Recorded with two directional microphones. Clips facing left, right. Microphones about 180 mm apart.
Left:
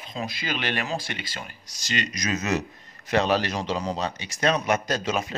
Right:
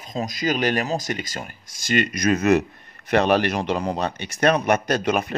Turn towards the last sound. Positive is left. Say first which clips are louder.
# right 5 dB
turn(degrees=-60)  # may be behind; listen again after turning